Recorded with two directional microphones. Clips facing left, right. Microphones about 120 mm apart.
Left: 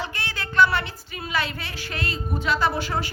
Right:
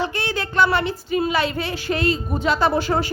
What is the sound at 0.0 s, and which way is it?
A woman's voice, 20° right (ahead or behind).